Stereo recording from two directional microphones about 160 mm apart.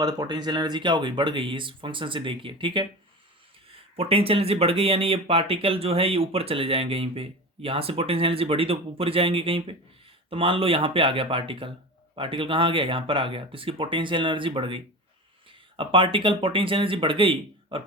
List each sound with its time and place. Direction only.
0.0 s speech: 25° right (ahead or behind)
3.9 s speech: 35° right (ahead or behind)